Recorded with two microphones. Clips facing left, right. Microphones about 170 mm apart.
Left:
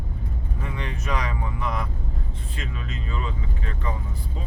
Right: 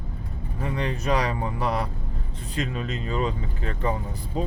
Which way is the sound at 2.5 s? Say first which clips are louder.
Right 7 dB; 35° right (ahead or behind).